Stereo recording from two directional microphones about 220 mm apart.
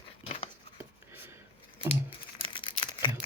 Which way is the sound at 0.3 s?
25° left (ahead or behind).